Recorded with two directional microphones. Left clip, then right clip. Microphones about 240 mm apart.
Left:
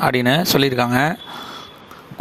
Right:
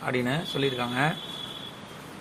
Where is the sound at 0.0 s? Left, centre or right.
Left.